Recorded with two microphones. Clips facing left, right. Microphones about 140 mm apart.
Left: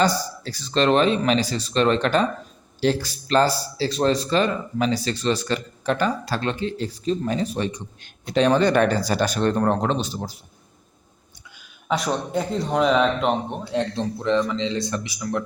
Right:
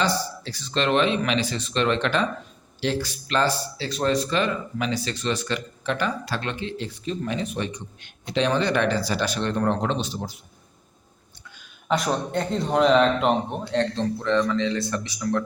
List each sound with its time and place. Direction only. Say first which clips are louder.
0.4 s speech: left 6 dB; 40° left (ahead or behind)
11.9 s speech: even; centre (ahead or behind)
13.7 s a man's voice: even; 10° left (ahead or behind)